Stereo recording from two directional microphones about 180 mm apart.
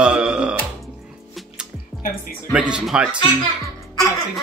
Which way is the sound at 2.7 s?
5° right (ahead or behind).